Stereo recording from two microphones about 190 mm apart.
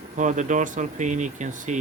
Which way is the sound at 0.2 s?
40° right (ahead or behind).